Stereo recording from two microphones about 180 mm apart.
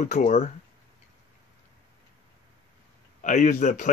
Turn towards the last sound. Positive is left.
turn(degrees=45)  # may be behind; listen again after turning